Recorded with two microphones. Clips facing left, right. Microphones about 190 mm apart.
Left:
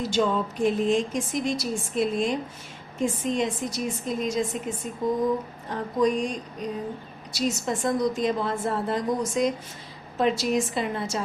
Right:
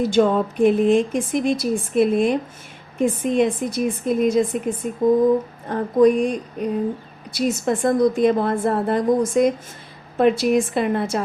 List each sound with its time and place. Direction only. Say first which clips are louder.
0.0 s a woman's voice: right 7 dB; 55° right (ahead or behind)